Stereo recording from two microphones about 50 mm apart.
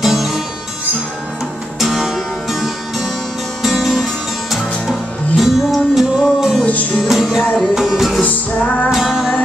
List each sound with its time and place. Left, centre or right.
0.0 s music: centre
1.8 s music: centre
6.6 s music: left
7.0 s music: centre
8.2 s music: left
8.9 s music: centre